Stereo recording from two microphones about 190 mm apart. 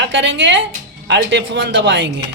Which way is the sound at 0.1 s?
75° right (ahead or behind).